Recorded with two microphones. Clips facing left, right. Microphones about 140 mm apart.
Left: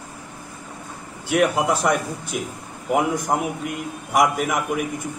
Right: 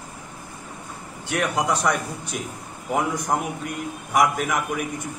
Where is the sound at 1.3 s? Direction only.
5° left (ahead or behind).